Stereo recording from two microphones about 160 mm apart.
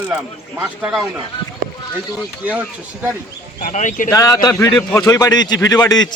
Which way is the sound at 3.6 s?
50° left (ahead or behind).